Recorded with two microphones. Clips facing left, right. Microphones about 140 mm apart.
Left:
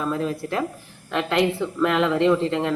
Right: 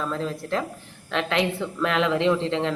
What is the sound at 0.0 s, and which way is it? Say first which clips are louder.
A woman's voice: left 3 dB; 10° left (ahead or behind).